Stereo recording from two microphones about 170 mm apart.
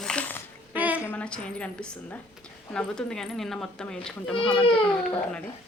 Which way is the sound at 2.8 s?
5° left (ahead or behind).